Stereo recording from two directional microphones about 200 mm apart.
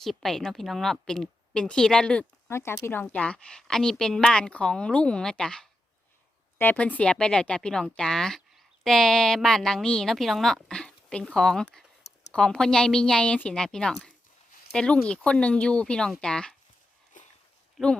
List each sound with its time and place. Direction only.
0.0 s speech: centre (ahead or behind)
17.2 s a sound: 40° left (ahead or behind)
17.8 s speech: centre (ahead or behind)